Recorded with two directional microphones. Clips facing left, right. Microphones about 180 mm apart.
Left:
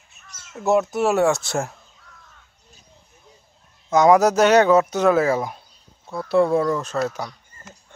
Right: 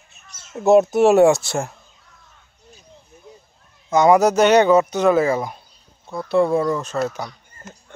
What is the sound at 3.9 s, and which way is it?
Speech, centre (ahead or behind).